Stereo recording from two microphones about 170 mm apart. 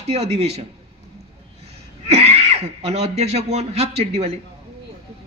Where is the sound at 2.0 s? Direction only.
40° right (ahead or behind).